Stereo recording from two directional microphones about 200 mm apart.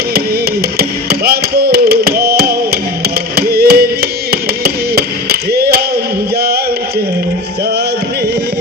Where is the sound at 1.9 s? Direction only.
50° right (ahead or behind).